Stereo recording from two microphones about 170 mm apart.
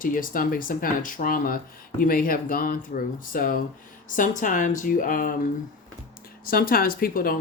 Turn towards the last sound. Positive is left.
turn(degrees=60)  # may be behind; listen again after turning